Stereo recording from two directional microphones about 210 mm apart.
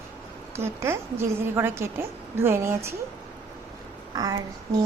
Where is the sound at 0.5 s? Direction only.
10° right (ahead or behind).